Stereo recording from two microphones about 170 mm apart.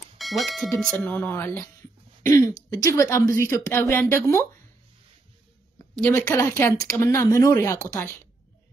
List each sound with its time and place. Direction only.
0.2 s speech: centre (ahead or behind); by 4.5 s 15° left (ahead or behind)
5.9 s speech: 10° left (ahead or behind)